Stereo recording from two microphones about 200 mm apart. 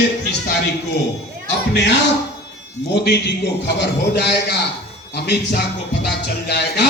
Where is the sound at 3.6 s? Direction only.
60° left (ahead or behind).